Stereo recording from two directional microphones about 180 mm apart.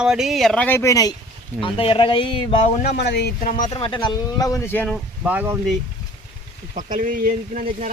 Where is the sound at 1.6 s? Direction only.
30° left (ahead or behind).